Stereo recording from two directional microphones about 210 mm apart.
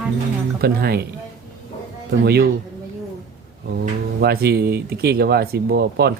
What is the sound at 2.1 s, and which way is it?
Speech, 50° right (ahead or behind).